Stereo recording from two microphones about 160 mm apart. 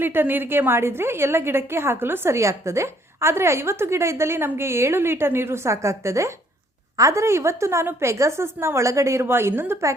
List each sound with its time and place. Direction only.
0.0 s a woman's voice: 15° right (ahead or behind)